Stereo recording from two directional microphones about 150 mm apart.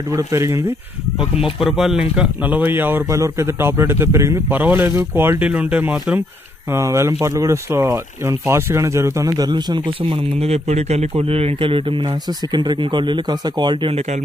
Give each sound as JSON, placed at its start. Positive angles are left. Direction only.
{"t": 0.1, "sound": "speech", "side_deg": -20}
{"t": 1.3, "sound": "speech", "side_deg": -5}